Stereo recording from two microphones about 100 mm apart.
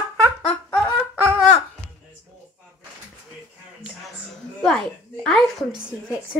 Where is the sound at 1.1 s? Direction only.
20° right (ahead or behind).